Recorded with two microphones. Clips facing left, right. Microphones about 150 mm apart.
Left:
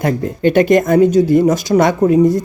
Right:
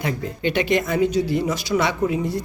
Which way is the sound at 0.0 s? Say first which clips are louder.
Left 9 dB; 50° left (ahead or behind).